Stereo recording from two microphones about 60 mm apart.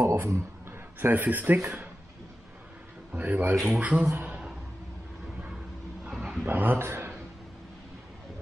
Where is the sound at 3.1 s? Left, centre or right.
Right.